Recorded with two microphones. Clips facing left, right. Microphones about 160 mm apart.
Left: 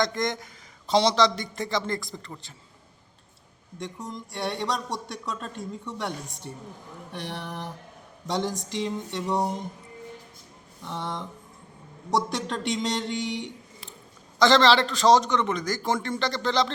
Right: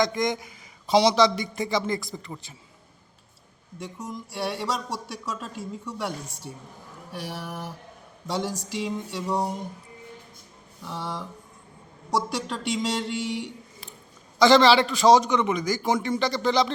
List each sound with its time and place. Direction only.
0.0 s a man's voice: 5° right (ahead or behind)
3.8 s a man's voice: 5° right (ahead or behind)
10.8 s a man's voice: 5° right (ahead or behind)